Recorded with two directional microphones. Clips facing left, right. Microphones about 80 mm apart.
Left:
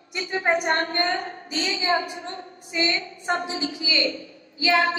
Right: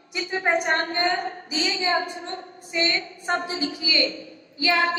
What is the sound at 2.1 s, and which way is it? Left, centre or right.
A woman's voice, right.